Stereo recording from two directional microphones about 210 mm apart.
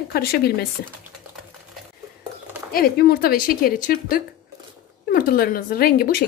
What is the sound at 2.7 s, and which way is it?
Speech, 45° left (ahead or behind).